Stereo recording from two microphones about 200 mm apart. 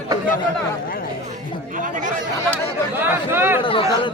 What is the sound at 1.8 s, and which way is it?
Speech, 40° right (ahead or behind).